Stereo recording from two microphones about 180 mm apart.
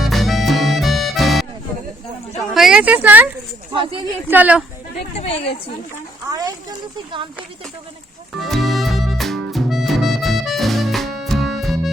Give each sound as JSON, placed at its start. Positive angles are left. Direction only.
{"t": 0.0, "sound": "music", "side_deg": 0}
{"t": 2.5, "sound": "speech", "side_deg": 0}
{"t": 3.7, "sound": "speech", "side_deg": -30}
{"t": 4.3, "sound": "a woman's voice", "side_deg": -10}
{"t": 5.1, "sound": "a woman's voice", "side_deg": 35}
{"t": 6.3, "sound": "speech", "side_deg": -20}
{"t": 8.4, "sound": "harmonica", "side_deg": 0}